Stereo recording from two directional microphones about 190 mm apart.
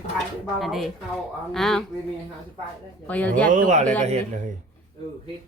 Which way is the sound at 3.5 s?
45° right (ahead or behind).